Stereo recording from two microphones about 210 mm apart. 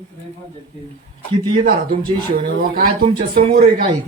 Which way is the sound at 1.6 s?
45° right (ahead or behind).